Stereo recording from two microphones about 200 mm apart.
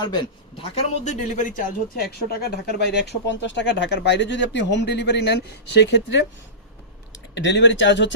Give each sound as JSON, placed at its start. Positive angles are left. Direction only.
{"t": 0.6, "sound": "speech", "side_deg": 35}
{"t": 7.3, "sound": "speech", "side_deg": 60}